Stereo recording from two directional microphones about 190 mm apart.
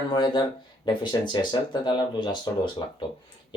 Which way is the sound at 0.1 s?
20° left (ahead or behind).